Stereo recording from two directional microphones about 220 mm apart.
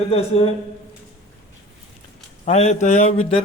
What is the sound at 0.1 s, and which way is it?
Speech, 25° left (ahead or behind).